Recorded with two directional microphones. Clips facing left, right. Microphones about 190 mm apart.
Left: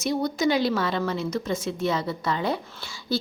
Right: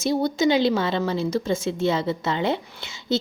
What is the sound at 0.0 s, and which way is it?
A woman's voice, 30° right (ahead or behind).